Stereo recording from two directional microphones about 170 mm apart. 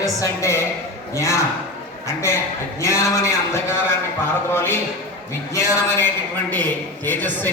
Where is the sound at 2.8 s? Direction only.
15° left (ahead or behind).